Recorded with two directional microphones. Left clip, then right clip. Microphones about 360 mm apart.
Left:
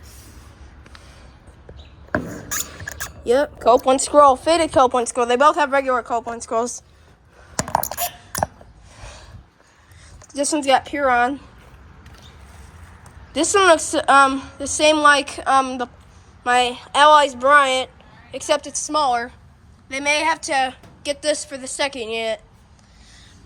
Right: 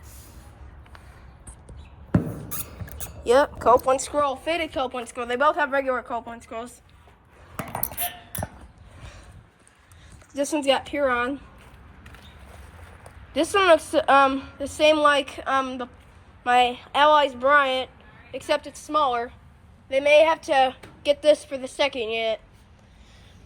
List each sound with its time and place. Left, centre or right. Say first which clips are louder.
3.1 s a woman's voice: left 1 dB; centre
10.3 s a woman's voice: left 5 dB; centre
13.3 s a woman's voice: left 3 dB; centre